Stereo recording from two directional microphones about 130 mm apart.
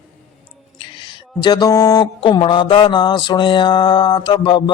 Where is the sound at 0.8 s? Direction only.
40° left (ahead or behind).